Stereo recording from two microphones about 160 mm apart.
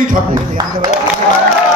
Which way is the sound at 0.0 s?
55° right (ahead or behind).